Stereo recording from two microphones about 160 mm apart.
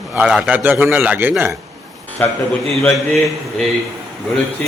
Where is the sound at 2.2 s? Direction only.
10° left (ahead or behind).